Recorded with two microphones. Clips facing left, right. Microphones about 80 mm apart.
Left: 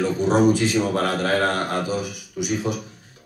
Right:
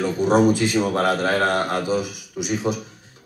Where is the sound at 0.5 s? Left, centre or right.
Left.